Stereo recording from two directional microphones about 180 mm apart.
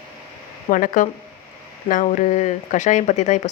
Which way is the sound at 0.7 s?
45° left (ahead or behind).